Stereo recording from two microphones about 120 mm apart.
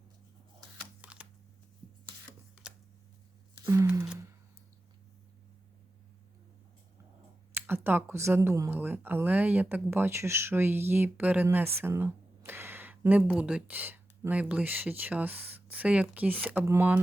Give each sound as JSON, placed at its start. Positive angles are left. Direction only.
{"t": 1.0, "sound": "shuffling cards", "side_deg": -10}
{"t": 2.6, "sound": "scissors", "side_deg": -5}
{"t": 3.6, "sound": "a sound", "side_deg": -25}
{"t": 7.5, "sound": "speech", "side_deg": -20}